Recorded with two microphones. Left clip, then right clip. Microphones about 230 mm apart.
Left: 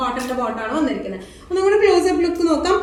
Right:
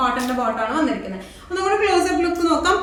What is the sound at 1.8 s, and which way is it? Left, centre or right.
Speech, centre.